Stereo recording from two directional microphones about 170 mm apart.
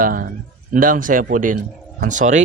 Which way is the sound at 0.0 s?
60° right (ahead or behind).